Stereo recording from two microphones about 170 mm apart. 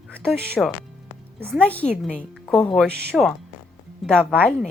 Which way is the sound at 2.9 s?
75° right (ahead or behind).